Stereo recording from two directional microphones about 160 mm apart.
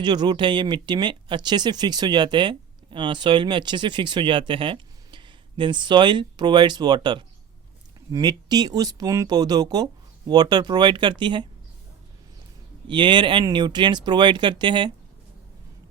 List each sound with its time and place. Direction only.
0.0 s speech: 25° right (ahead or behind)
12.9 s speech: 30° right (ahead or behind)